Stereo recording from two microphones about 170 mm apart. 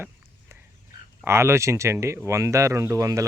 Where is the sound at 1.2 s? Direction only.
15° right (ahead or behind).